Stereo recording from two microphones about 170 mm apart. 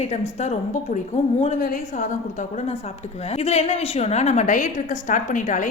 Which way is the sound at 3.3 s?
40° left (ahead or behind).